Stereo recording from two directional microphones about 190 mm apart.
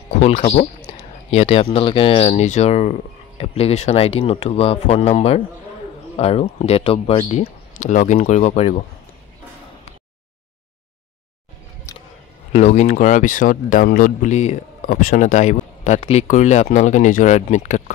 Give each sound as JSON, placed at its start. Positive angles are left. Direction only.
{"t": 0.1, "sound": "speech", "side_deg": 35}
{"t": 12.5, "sound": "speech", "side_deg": 35}